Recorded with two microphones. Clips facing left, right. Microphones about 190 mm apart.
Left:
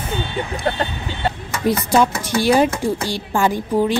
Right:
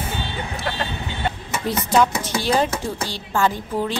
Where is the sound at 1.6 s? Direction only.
10° left (ahead or behind).